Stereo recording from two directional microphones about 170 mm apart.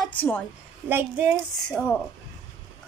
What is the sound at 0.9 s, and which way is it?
Speech, 15° right (ahead or behind).